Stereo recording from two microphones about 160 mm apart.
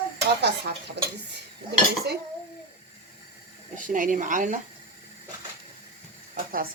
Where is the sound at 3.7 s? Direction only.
55° right (ahead or behind).